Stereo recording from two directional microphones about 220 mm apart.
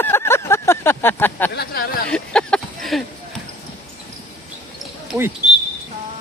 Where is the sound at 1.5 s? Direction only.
45° left (ahead or behind).